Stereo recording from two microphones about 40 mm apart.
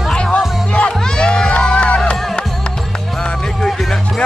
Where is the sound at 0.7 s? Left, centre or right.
Left.